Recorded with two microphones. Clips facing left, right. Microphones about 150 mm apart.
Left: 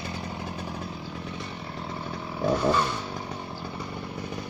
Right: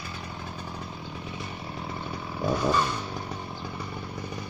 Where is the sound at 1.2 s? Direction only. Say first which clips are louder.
Left 1 dB; 5° right (ahead or behind).